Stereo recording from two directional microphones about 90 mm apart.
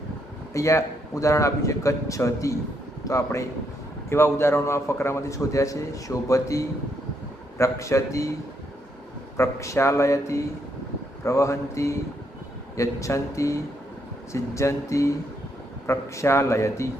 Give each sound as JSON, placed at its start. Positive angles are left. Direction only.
{"t": 0.5, "sound": "a man's voice", "side_deg": 35}
{"t": 9.4, "sound": "a man's voice", "side_deg": 35}